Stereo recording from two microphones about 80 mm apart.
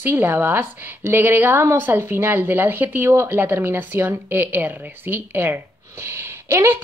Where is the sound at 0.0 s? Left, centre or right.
Right.